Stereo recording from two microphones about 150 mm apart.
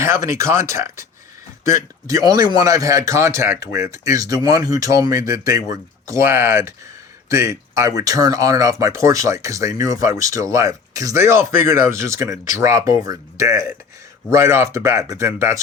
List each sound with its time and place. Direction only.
0.0 s speech: 20° right (ahead or behind)